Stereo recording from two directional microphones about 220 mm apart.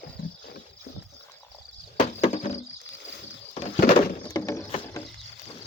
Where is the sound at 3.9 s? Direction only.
15° left (ahead or behind).